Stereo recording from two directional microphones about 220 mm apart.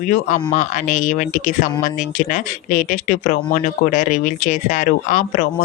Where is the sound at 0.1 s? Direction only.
35° left (ahead or behind).